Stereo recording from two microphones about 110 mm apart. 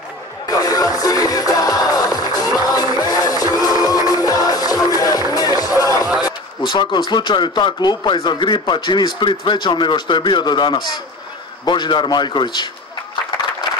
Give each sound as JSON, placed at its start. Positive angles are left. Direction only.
{"t": 0.5, "sound": "music", "side_deg": 35}
{"t": 6.2, "sound": "speech", "side_deg": 45}